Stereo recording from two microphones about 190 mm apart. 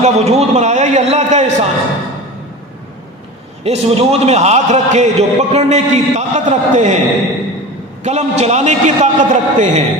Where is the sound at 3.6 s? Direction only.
35° right (ahead or behind).